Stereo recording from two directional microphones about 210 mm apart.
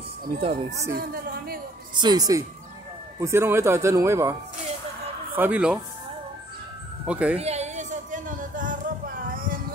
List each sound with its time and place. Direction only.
0.4 s speech: 30° right (ahead or behind)
0.9 s a woman's voice: 45° right (ahead or behind)
2.0 s speech: 20° right (ahead or behind)
7.1 s speech: 5° right (ahead or behind)
7.3 s a sound: 30° right (ahead or behind)